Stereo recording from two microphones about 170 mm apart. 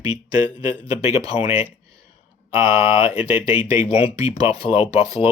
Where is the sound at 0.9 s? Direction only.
35° left (ahead or behind).